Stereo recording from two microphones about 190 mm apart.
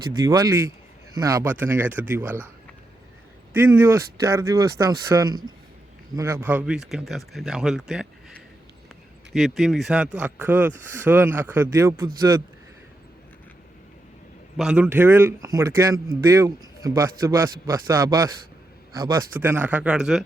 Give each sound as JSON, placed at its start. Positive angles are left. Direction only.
{"t": 1.1, "sound": "speech", "side_deg": -20}
{"t": 3.5, "sound": "speech", "side_deg": -10}
{"t": 9.3, "sound": "speech", "side_deg": 0}
{"t": 14.5, "sound": "speech", "side_deg": -5}